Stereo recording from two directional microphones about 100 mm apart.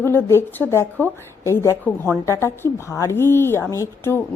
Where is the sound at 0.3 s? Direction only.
25° left (ahead or behind).